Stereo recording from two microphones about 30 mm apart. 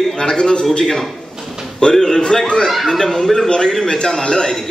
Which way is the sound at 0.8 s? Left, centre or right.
Centre.